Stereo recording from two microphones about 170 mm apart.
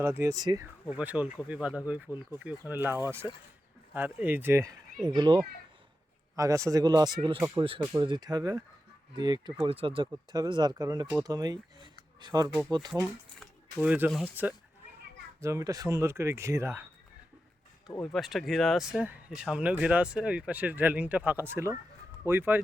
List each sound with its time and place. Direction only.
0.0 s speech: 15° right (ahead or behind)
0.9 s speech: 10° right (ahead or behind)
5.0 s speech: 25° right (ahead or behind)
13.4 s a sound: 5° right (ahead or behind)
14.4 s speech: 10° right (ahead or behind)
18.0 s speech: centre (ahead or behind)